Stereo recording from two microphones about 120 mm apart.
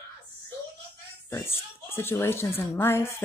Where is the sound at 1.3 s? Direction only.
20° left (ahead or behind).